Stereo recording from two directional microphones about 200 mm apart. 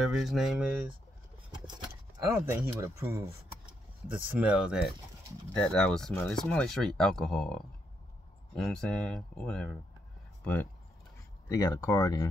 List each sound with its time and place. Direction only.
0.0 s speech: centre (ahead or behind)
2.8 s speech: 15° right (ahead or behind); by 12.3 s 15° left (ahead or behind)